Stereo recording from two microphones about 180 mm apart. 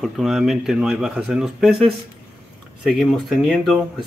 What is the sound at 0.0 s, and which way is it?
Speech, centre (ahead or behind).